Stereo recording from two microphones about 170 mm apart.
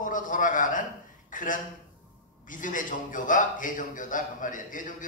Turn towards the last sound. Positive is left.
turn(degrees=50)  # may be behind; listen again after turning